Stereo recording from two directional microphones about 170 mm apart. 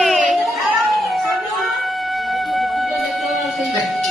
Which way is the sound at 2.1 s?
Centre (ahead or behind).